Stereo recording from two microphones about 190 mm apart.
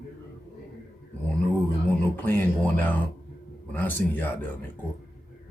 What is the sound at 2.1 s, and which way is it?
Speech, 10° left (ahead or behind).